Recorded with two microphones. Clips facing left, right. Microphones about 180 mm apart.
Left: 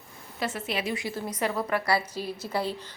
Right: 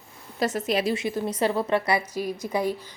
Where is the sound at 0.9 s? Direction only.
20° right (ahead or behind).